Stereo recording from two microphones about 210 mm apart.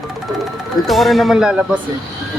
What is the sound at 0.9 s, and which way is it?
Speech, centre (ahead or behind).